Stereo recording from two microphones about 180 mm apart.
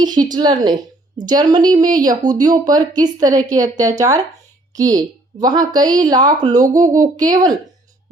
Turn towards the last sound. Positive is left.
turn(degrees=-25)  # may be behind; listen again after turning